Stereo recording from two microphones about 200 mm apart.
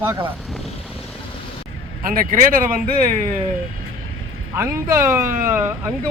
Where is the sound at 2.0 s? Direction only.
45° right (ahead or behind).